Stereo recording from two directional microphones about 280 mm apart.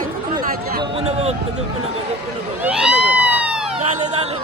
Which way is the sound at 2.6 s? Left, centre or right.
Centre.